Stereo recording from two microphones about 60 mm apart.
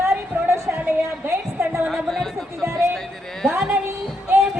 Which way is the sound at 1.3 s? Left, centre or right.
Right.